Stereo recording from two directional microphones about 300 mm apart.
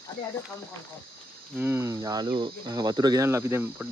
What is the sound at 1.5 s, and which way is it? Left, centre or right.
Speech, centre.